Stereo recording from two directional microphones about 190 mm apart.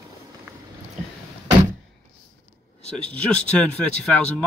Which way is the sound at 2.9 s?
5° left (ahead or behind).